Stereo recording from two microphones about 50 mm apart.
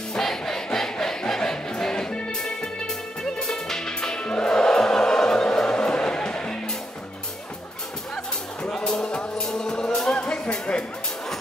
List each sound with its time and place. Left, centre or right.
0.2 s crowd: centre
3.3 s music: centre
8.6 s music: centre